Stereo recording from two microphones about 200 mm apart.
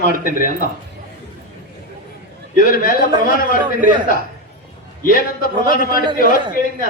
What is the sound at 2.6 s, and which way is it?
Speech, 45° left (ahead or behind).